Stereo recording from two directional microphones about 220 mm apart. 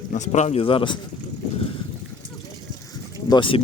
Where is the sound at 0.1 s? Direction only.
35° left (ahead or behind).